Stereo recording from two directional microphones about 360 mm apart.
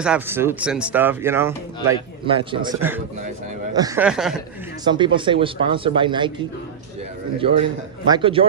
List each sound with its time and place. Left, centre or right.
0.0 s speech: centre
4.8 s speech: centre
7.3 s speech: centre